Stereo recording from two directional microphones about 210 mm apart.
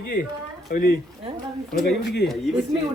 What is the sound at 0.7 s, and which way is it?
Speech, 40° left (ahead or behind).